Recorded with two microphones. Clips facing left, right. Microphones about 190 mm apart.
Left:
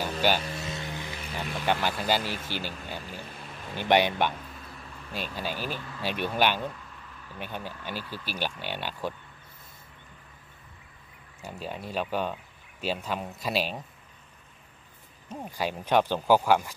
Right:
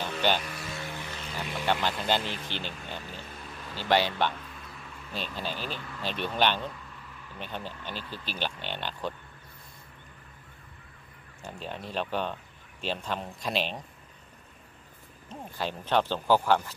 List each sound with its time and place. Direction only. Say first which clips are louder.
0.0 s music: left 2 dB; 10° left (ahead or behind)
0.6 s vehicle: left 2 dB; 20° left (ahead or behind)
1.7 s speech: left 1 dB; 10° left (ahead or behind)
11.4 s speech: left 2 dB; 10° left (ahead or behind)
15.2 s speech: left 3 dB; 10° left (ahead or behind)